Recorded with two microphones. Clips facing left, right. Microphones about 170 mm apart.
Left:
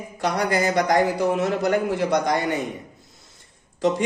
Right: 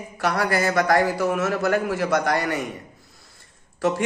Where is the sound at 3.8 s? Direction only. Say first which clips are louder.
Left 1 dB; 20° left (ahead or behind).